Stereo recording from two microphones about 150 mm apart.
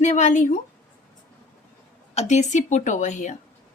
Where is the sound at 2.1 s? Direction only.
50° left (ahead or behind).